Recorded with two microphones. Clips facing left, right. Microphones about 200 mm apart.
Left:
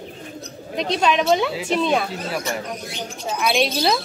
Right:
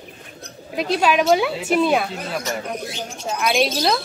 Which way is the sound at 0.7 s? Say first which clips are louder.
Right 1 dB; 5° right (ahead or behind).